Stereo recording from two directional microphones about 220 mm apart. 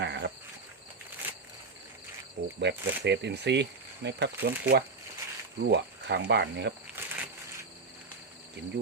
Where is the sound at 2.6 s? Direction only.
50° right (ahead or behind).